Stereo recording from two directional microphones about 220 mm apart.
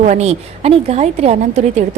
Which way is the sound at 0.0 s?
30° right (ahead or behind).